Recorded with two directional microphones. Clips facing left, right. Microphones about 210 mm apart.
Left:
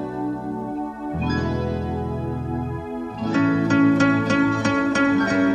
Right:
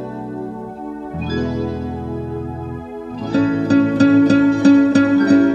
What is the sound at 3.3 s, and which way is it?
Music, 35° right (ahead or behind).